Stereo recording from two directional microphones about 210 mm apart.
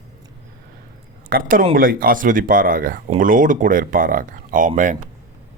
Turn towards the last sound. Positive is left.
turn(degrees=-35)  # may be behind; listen again after turning